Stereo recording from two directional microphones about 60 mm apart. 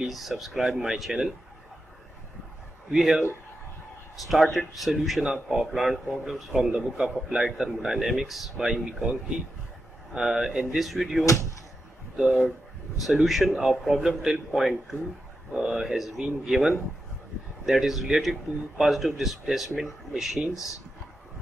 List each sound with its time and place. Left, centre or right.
0.0 s a man's voice: centre
2.9 s speech: centre
4.2 s a man's voice: centre
10.1 s a man's voice: centre
20.5 s speech: left